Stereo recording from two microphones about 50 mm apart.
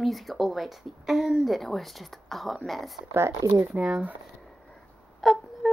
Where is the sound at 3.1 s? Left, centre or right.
Right.